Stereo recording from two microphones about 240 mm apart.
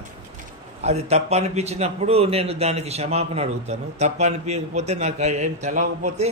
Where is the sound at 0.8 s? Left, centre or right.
Right.